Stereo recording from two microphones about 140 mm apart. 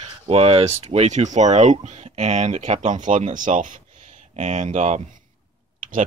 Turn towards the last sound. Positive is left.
turn(degrees=-70)  # may be behind; listen again after turning